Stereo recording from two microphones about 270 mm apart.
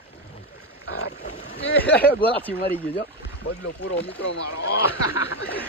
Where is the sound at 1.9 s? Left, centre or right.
Left.